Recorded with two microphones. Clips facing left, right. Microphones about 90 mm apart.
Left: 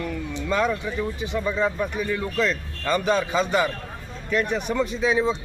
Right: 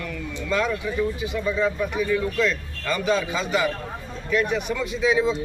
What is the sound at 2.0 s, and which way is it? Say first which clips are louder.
A man's voice: right 3 dB; 45° left (ahead or behind).